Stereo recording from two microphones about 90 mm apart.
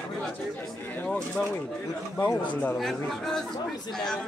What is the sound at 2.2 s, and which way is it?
Speech, 20° left (ahead or behind).